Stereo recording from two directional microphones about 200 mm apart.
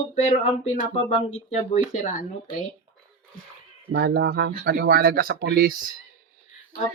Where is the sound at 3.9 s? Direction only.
55° right (ahead or behind).